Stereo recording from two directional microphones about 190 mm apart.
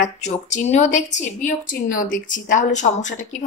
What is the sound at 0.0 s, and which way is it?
A woman's voice, 40° left (ahead or behind).